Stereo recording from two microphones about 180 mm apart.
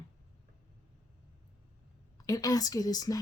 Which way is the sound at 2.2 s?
20° left (ahead or behind).